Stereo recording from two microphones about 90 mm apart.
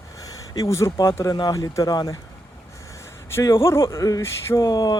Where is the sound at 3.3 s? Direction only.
30° left (ahead or behind).